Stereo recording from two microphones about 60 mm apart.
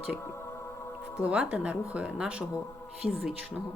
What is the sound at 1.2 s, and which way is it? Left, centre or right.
Speech, centre.